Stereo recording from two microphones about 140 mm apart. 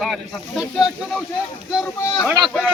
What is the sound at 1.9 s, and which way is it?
Speech, 20° left (ahead or behind).